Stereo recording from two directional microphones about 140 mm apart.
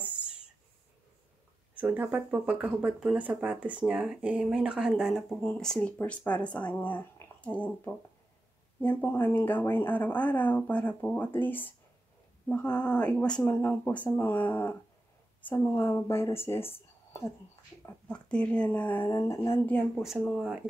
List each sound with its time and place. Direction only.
1.8 s speech: 10° right (ahead or behind)
5.4 s speech: 5° left (ahead or behind)
19.0 s a sound: 20° left (ahead or behind)
20.0 s speech: centre (ahead or behind)